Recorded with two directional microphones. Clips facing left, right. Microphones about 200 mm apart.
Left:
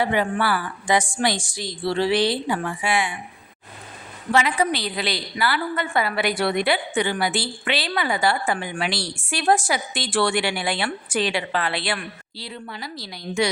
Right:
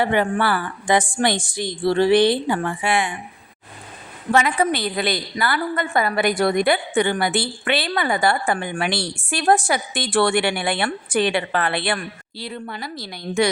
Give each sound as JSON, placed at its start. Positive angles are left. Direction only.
{"t": 0.0, "sound": "a woman's voice", "side_deg": -55}
{"t": 4.3, "sound": "a woman's voice", "side_deg": -50}